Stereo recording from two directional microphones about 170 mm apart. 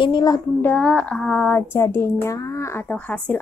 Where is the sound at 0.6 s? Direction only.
10° left (ahead or behind).